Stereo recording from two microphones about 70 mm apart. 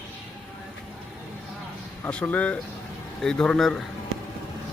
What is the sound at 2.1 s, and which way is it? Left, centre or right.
Speech, centre.